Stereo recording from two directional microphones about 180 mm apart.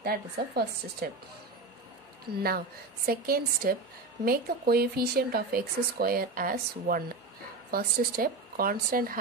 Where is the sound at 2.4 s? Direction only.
60° right (ahead or behind).